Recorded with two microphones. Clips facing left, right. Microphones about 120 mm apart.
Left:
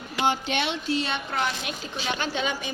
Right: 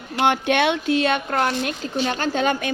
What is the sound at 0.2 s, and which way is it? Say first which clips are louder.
A child's voice: right 7 dB; 60° right (ahead or behind).